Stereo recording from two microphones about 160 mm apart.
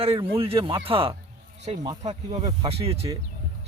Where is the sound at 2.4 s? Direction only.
35° right (ahead or behind).